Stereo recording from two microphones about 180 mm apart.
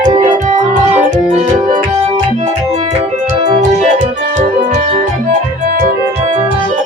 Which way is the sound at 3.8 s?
40° right (ahead or behind).